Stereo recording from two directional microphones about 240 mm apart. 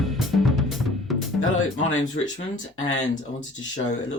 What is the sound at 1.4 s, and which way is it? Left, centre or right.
Speech, left.